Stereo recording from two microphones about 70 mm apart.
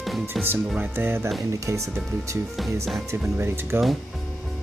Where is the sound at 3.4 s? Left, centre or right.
Right.